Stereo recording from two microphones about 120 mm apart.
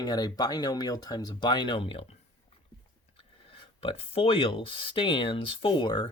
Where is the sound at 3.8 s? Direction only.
50° left (ahead or behind).